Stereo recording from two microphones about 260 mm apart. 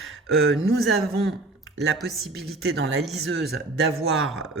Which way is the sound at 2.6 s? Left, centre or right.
Right.